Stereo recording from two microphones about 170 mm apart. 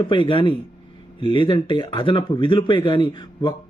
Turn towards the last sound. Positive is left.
turn(degrees=25)  # may be behind; listen again after turning